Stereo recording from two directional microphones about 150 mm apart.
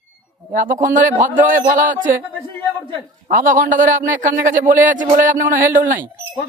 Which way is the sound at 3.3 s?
65° right (ahead or behind).